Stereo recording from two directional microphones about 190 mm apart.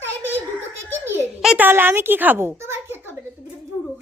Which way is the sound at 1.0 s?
5° right (ahead or behind).